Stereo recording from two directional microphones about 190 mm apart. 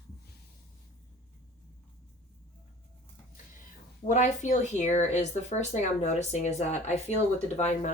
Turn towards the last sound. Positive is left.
turn(degrees=35)  # may be behind; listen again after turning